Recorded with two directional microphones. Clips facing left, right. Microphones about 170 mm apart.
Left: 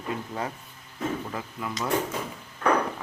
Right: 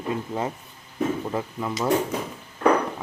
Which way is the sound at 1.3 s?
25° right (ahead or behind).